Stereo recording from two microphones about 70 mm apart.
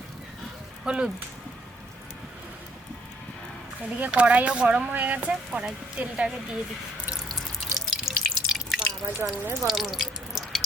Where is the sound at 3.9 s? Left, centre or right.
Right.